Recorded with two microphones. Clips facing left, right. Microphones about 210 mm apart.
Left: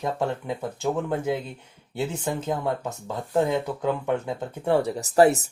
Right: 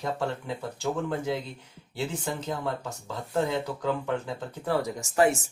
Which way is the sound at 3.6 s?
20° left (ahead or behind).